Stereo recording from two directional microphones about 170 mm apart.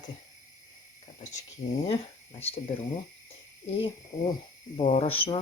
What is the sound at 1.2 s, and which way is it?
Speech, 45° left (ahead or behind).